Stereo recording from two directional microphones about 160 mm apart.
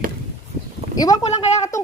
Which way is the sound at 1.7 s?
50° left (ahead or behind).